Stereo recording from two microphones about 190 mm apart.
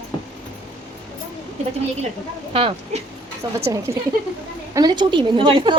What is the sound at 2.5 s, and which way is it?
A woman's voice, 30° right (ahead or behind).